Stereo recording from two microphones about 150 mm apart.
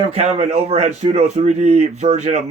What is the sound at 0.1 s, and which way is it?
Speech, 45° right (ahead or behind).